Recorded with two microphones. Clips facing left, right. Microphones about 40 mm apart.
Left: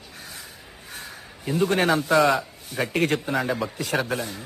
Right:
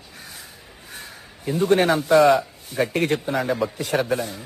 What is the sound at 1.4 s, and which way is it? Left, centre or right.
Speech, centre.